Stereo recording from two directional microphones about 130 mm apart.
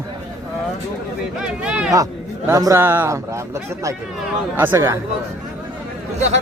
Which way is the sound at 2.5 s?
25° right (ahead or behind).